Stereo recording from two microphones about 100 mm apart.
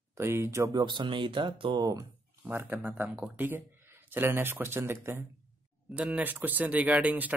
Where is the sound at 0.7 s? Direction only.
50° right (ahead or behind).